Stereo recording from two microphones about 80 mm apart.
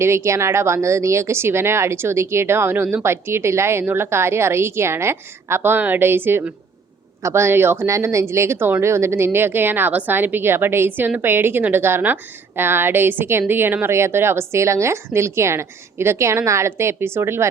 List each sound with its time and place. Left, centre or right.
0.0 s speech: right